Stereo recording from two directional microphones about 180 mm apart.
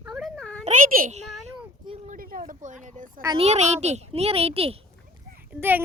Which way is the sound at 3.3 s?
35° right (ahead or behind).